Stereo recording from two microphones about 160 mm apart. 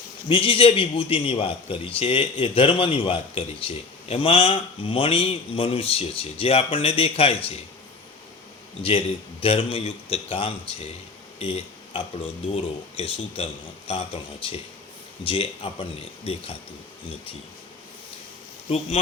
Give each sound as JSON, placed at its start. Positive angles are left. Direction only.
{"t": 0.3, "sound": "a man's voice", "side_deg": 35}
{"t": 8.8, "sound": "a man's voice", "side_deg": 35}